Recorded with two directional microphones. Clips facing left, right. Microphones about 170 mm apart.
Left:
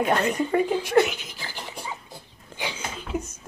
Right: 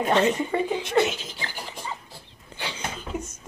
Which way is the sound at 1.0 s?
25° right (ahead or behind).